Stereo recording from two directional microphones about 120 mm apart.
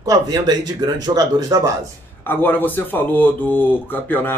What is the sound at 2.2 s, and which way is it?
Speech, 15° left (ahead or behind).